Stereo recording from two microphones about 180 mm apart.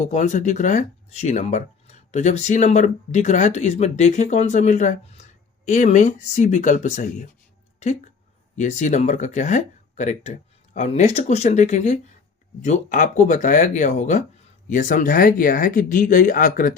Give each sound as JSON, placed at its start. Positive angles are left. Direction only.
{"t": 0.0, "sound": "speech", "side_deg": 40}
{"t": 8.5, "sound": "speech", "side_deg": 40}